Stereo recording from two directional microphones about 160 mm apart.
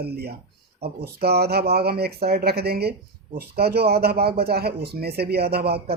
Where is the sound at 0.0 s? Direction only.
85° right.